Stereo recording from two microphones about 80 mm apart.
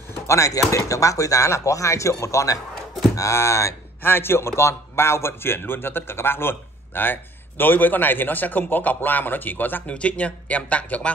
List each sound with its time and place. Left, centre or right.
0.1 s a man's voice: left; by 11.1 s centre